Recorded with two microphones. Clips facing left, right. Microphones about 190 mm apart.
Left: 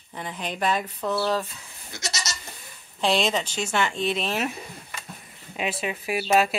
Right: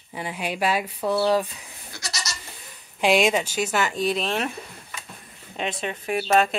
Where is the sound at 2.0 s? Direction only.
20° left (ahead or behind).